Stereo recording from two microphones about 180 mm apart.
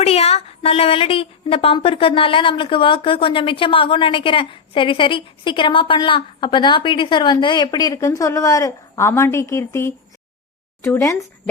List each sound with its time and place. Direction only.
0.0 s a woman's voice: 35° left (ahead or behind); by 11.3 s 15° left (ahead or behind)